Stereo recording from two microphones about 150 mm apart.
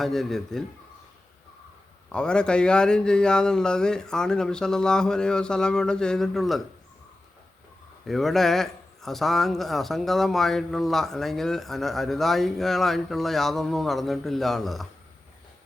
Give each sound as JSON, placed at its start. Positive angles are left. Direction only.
{"t": 0.0, "sound": "a man's voice", "side_deg": 0}
{"t": 2.1, "sound": "a man's voice", "side_deg": 5}
{"t": 8.0, "sound": "a man's voice", "side_deg": 0}